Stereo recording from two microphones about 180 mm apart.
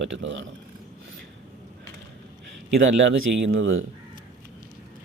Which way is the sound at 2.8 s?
85° right.